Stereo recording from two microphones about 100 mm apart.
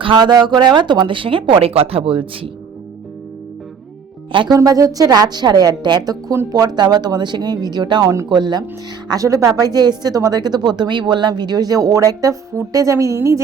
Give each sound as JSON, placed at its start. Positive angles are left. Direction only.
{"t": 0.0, "sound": "speech", "side_deg": -50}
{"t": 4.3, "sound": "speech", "side_deg": -55}
{"t": 4.5, "sound": "speech", "side_deg": -35}
{"t": 9.0, "sound": "speech", "side_deg": -35}